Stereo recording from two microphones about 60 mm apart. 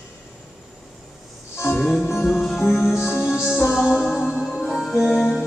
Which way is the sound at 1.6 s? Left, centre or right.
Left.